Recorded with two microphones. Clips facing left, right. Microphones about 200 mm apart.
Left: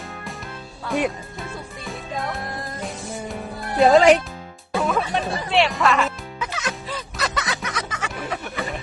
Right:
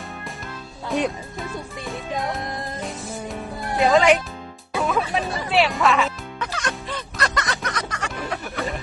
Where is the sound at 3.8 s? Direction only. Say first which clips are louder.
Left 3 dB; 35° left (ahead or behind).